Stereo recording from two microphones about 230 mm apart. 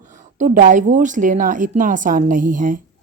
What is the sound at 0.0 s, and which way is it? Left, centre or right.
Speech, right.